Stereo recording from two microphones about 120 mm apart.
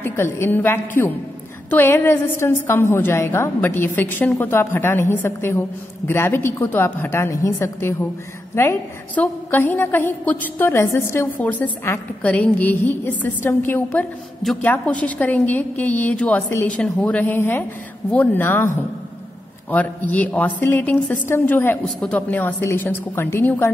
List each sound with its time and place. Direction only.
0.0 s a woman's voice: 20° left (ahead or behind)